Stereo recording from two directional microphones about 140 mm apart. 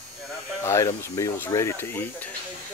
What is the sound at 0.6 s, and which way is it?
Speech, 20° left (ahead or behind).